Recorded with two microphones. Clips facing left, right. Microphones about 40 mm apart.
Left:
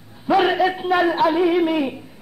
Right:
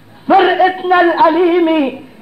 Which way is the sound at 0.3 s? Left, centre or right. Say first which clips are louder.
Right 8 dB; right.